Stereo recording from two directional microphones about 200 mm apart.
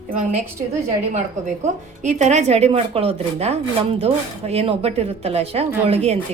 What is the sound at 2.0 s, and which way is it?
Speech, 35° right (ahead or behind).